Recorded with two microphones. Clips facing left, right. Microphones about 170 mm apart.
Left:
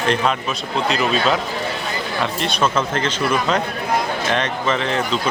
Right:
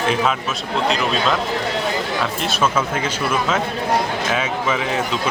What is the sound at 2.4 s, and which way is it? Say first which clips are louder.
Speech: left 1 dB; 5° right (ahead or behind).